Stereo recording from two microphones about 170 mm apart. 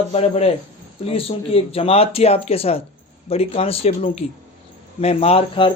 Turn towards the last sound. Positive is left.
turn(degrees=35)  # may be behind; listen again after turning